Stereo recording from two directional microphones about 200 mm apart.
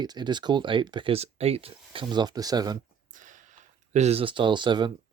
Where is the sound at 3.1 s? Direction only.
40° right (ahead or behind); by 4.9 s 20° right (ahead or behind).